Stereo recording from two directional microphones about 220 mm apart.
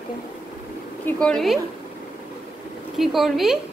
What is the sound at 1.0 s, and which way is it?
Speech, centre (ahead or behind).